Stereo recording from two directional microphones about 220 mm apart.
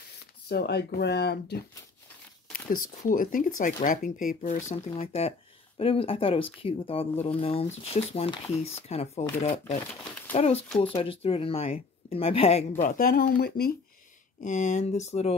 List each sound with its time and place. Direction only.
0.5 s speech: 45° left (ahead or behind)
3.0 s speech: 35° left (ahead or behind)
12.8 s speech: 40° left (ahead or behind)
14.4 s speech: 35° left (ahead or behind)